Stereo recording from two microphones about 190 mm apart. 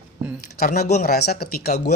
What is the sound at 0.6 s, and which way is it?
Speech, 40° left (ahead or behind).